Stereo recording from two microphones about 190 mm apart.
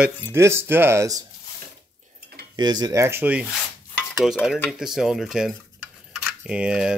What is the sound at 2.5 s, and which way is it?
Speech, 20° right (ahead or behind).